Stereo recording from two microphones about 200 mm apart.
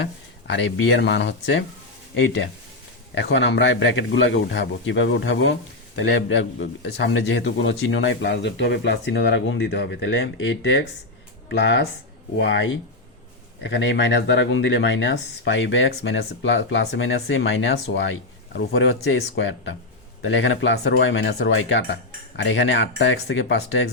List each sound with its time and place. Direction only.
0.0 s speech: 65° left (ahead or behind)